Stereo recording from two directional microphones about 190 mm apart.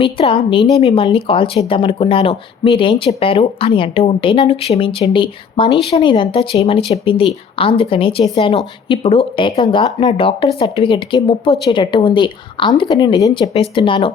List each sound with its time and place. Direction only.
0.0 s speech: 30° left (ahead or behind)